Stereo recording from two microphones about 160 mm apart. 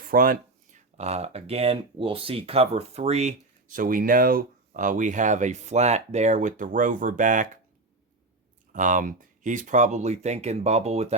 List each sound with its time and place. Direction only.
0.0 s a sound: 60° right (ahead or behind)
0.9 s speech: 45° right (ahead or behind)
8.7 s speech: 55° right (ahead or behind)